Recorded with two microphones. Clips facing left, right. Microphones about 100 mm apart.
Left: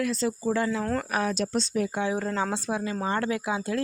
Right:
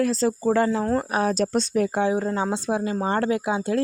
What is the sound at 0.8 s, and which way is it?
Speech, 25° right (ahead or behind).